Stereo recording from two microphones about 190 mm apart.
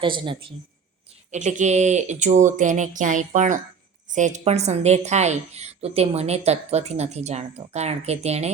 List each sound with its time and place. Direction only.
0.0 s a woman's voice: 25° right (ahead or behind)
1.3 s a woman's voice: 40° right (ahead or behind)